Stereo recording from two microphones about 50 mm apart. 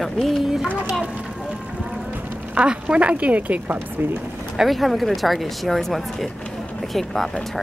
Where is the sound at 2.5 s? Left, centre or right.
Right.